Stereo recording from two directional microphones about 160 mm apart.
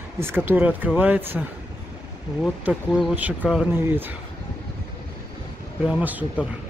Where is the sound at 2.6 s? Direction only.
Centre (ahead or behind).